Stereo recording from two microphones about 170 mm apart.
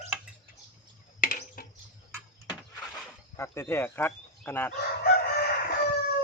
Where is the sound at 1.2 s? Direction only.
55° left (ahead or behind).